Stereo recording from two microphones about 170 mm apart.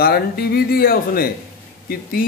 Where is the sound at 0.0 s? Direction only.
65° left (ahead or behind).